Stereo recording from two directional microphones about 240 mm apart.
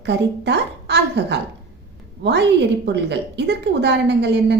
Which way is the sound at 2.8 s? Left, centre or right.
Right.